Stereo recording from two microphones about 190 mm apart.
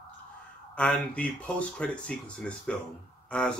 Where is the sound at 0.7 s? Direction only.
5° left (ahead or behind).